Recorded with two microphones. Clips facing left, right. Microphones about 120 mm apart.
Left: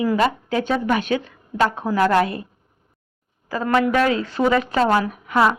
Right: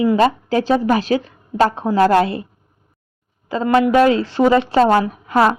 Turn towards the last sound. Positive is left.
turn(degrees=-30)  # may be behind; listen again after turning